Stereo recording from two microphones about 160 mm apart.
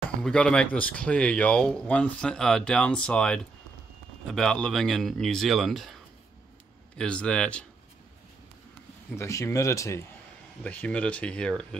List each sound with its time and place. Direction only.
0.2 s speech: 5° left (ahead or behind)
7.0 s speech: 5° left (ahead or behind)
9.1 s speech: 20° left (ahead or behind)